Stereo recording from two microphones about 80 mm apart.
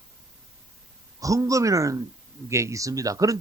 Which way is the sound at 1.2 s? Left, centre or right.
Right.